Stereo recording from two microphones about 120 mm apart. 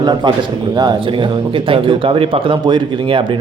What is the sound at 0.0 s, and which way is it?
Speech, 35° right (ahead or behind).